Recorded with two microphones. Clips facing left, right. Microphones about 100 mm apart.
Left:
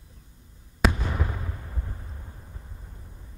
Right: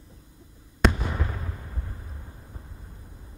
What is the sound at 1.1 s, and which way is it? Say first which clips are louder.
Artillery fire: left 1 dB; 5° left (ahead or behind).